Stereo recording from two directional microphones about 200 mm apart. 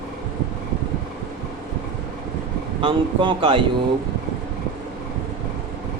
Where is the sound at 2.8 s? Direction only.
25° right (ahead or behind).